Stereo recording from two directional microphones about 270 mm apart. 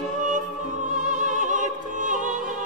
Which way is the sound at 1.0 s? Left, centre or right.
Right.